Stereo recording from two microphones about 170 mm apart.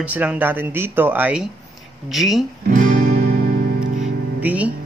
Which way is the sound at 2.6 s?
55° right (ahead or behind).